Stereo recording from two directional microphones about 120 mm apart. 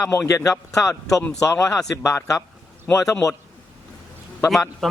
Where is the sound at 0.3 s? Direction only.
25° left (ahead or behind).